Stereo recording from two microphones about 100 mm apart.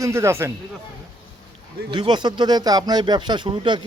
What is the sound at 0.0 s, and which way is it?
Speech, 30° right (ahead or behind).